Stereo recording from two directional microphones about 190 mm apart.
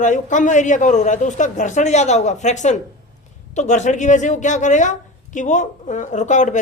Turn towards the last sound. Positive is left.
turn(degrees=40)  # may be behind; listen again after turning